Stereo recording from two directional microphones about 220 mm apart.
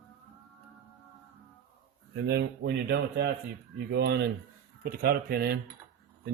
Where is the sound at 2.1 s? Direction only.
50° right (ahead or behind).